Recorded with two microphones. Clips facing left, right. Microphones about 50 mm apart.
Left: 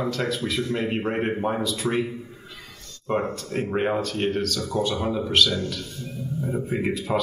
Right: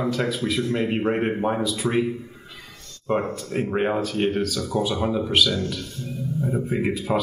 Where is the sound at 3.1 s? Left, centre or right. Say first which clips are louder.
Right 1 dB; centre.